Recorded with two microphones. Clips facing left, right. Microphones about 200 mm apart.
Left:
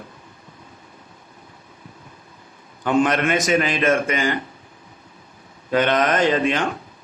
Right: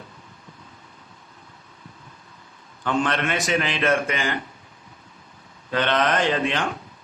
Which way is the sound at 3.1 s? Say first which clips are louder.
Left 5 dB; 45° left (ahead or behind).